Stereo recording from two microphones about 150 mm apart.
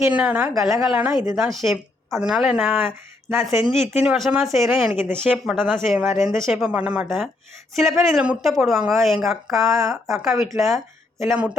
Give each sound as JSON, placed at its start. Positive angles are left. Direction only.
{"t": 0.1, "sound": "a woman's voice", "side_deg": -10}
{"t": 9.6, "sound": "speech", "side_deg": -20}
{"t": 9.9, "sound": "speech", "side_deg": 0}